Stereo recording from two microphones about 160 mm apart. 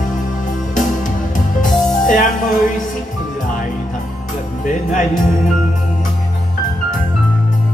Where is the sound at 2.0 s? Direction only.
55° left (ahead or behind).